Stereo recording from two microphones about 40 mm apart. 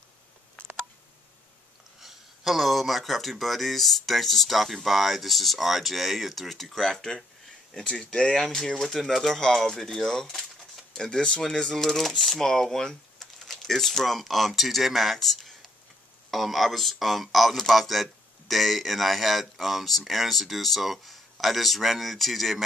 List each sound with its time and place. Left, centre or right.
2.0 s speech: centre
7.7 s speech: left
8.4 s speech: centre
11.0 s speech: left
11.7 s speech: centre